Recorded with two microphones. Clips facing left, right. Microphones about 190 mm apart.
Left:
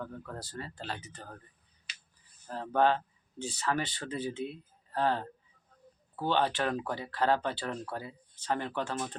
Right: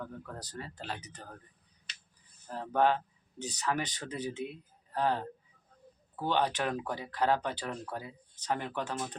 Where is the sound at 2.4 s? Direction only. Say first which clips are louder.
Left 1 dB; 10° right (ahead or behind).